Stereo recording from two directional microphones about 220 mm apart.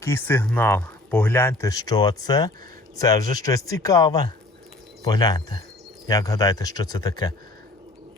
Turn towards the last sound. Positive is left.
turn(degrees=20)  # may be behind; listen again after turning